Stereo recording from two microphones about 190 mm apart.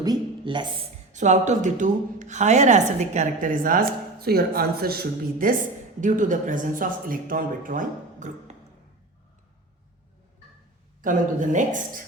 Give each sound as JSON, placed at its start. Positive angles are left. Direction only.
{"t": 0.0, "sound": "a man's voice", "side_deg": -20}
{"t": 1.1, "sound": "a woman's voice", "side_deg": -40}
{"t": 11.0, "sound": "a woman's voice", "side_deg": -40}